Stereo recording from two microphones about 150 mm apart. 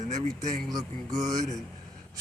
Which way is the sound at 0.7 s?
25° right (ahead or behind).